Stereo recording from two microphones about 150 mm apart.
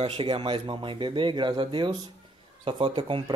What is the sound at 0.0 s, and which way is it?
Speech, 40° right (ahead or behind).